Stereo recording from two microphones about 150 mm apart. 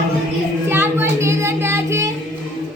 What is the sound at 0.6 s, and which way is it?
Child singing, 15° right (ahead or behind).